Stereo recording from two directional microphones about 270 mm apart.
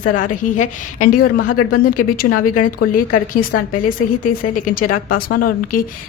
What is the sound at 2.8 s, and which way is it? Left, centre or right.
Speech, left.